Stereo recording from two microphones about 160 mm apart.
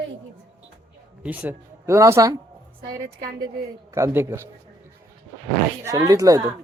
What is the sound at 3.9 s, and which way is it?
Speech, 15° right (ahead or behind).